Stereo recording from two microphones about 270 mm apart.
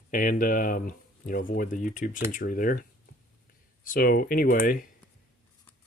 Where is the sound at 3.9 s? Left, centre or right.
Left.